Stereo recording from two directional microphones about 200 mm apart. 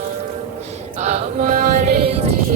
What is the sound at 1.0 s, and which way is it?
Music, 35° right (ahead or behind).